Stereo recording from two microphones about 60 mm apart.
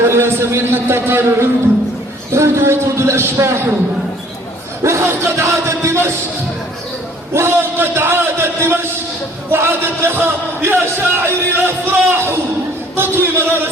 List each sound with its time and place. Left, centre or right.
0.0 s a man's voice: right
4.8 s a man's voice: right
7.3 s a man's voice: right